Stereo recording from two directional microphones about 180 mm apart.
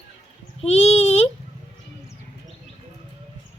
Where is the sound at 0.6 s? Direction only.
35° left (ahead or behind).